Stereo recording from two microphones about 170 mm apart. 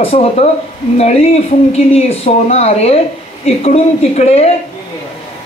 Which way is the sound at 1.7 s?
40° left (ahead or behind).